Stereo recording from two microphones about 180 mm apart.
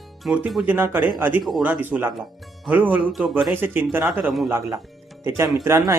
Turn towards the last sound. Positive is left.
turn(degrees=-15)  # may be behind; listen again after turning